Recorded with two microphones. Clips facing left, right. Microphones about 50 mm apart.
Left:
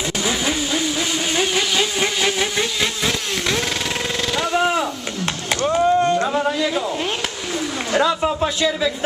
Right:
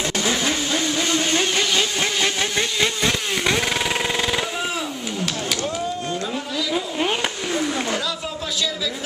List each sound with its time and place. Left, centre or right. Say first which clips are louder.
0.2 s vehicle: left 2 dB; centre
4.6 s chop: left 7 dB; left
8.0 s a sound: left 9 dB; left